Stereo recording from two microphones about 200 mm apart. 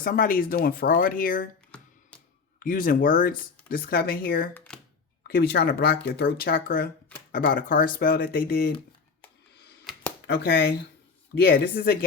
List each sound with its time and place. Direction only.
0.0 s speech: 45° left (ahead or behind)
1.7 s music: 5° left (ahead or behind)
2.6 s speech: 45° left (ahead or behind)
4.5 s a sound: 5° left (ahead or behind)
5.3 s speech: 50° left (ahead or behind)
10.2 s speech: 55° left (ahead or behind)
11.4 s speech: 45° left (ahead or behind)